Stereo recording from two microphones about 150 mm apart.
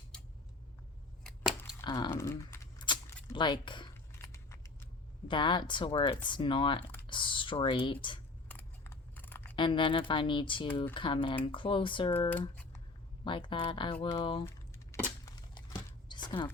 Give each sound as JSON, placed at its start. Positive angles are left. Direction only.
{"t": 1.2, "sound": "scissors", "side_deg": -5}
{"t": 1.8, "sound": "speech", "side_deg": 30}
{"t": 2.0, "sound": "speech", "side_deg": 15}
{"t": 2.7, "sound": "keys jangling", "side_deg": 30}
{"t": 3.3, "sound": "speech", "side_deg": 30}
{"t": 4.2, "sound": "scissors", "side_deg": 20}
{"t": 5.3, "sound": "speech", "side_deg": 30}
{"t": 8.4, "sound": "scissors", "side_deg": 15}
{"t": 9.6, "sound": "speech", "side_deg": 35}
{"t": 13.2, "sound": "speech", "side_deg": 35}
{"t": 15.2, "sound": "a sound", "side_deg": 30}